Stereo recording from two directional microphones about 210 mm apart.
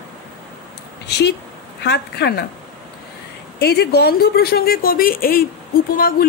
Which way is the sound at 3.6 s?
50° left (ahead or behind).